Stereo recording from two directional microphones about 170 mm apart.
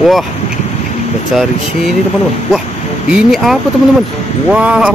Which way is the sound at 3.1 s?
Centre (ahead or behind).